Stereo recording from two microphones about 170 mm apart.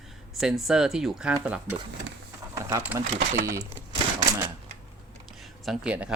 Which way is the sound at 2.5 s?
20° right (ahead or behind).